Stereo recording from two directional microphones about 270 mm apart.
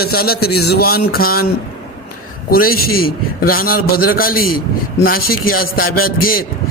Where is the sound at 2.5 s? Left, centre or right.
Left.